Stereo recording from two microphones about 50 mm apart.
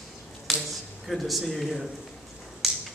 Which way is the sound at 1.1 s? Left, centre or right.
Centre.